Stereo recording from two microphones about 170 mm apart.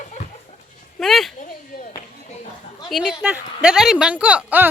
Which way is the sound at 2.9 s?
5° right (ahead or behind).